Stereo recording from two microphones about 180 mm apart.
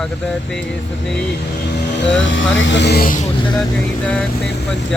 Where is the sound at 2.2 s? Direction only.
90° left; by 3.1 s 60° left (ahead or behind).